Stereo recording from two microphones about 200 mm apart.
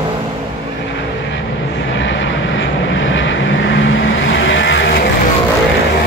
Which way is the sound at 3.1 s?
65° left (ahead or behind).